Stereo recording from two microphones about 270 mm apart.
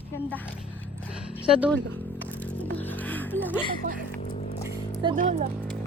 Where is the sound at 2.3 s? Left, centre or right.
Centre.